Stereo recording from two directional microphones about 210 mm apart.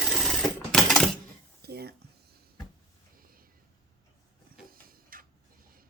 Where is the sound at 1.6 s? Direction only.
50° right (ahead or behind).